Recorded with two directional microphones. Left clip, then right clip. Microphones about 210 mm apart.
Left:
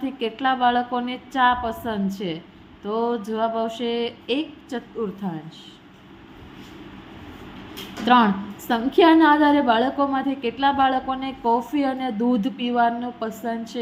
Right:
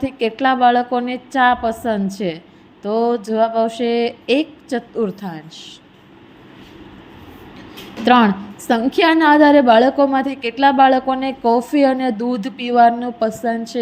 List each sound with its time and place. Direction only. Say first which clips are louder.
0.0 s a woman's voice: right 6 dB; 25° right (ahead or behind)
8.0 s a woman's voice: right 4 dB; 25° right (ahead or behind)